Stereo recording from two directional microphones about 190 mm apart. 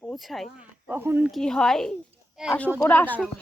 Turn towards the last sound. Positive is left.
turn(degrees=10)  # may be behind; listen again after turning